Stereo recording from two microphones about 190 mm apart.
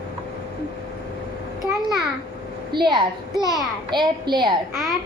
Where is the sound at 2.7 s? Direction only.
25° right (ahead or behind).